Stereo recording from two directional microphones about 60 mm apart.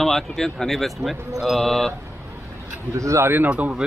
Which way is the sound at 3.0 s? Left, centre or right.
Right.